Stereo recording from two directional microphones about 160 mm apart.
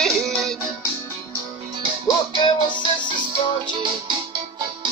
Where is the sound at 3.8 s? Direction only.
30° right (ahead or behind).